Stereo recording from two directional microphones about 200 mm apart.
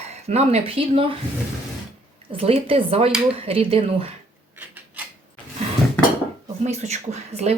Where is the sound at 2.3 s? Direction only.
30° right (ahead or behind).